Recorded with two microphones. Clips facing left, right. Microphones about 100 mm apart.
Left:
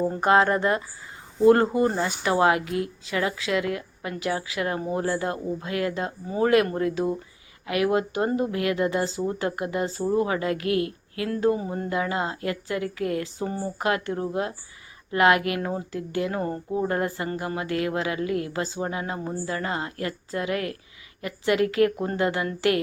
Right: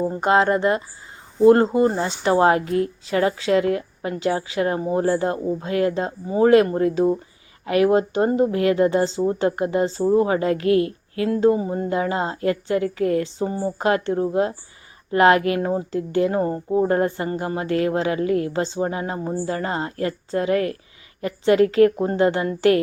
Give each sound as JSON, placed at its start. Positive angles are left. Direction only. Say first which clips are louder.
{"t": 0.0, "sound": "speech", "louder": "right 2 dB", "side_deg": -20}